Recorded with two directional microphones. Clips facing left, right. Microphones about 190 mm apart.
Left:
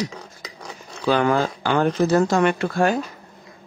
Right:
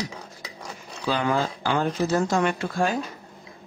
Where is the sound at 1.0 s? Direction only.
65° left (ahead or behind).